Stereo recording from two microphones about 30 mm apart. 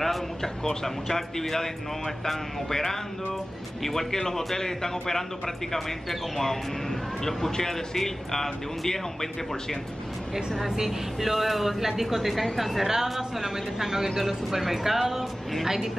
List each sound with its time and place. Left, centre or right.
0.0 s a man's voice: centre
10.9 s speech: centre